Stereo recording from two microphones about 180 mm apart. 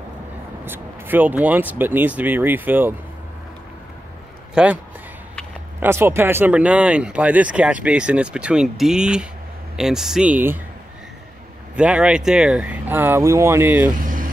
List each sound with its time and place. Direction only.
0.7 s speech: 10° right (ahead or behind)
4.6 s speech: 5° right (ahead or behind)
5.8 s speech: 15° right (ahead or behind)
11.7 s speech: 5° right (ahead or behind)
13.9 s vehicle: 50° right (ahead or behind)